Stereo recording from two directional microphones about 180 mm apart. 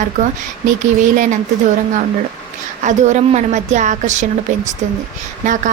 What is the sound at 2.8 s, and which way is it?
A woman's voice, 40° right (ahead or behind).